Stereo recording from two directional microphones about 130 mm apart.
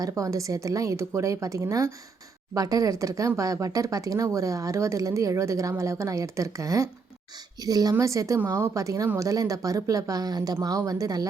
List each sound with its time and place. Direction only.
0.0 s speech: 25° right (ahead or behind)